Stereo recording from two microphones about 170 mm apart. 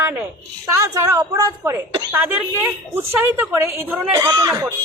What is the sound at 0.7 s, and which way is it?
Speech, 15° right (ahead or behind).